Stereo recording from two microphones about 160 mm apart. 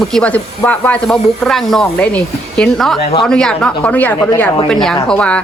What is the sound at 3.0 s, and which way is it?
Speech, 40° left (ahead or behind).